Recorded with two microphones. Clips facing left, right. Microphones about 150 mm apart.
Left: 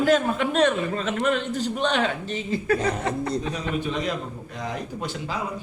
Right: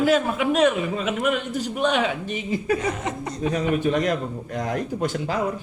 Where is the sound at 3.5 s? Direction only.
55° right (ahead or behind).